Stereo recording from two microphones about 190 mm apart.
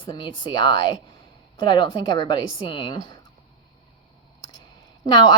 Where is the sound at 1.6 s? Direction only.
25° left (ahead or behind).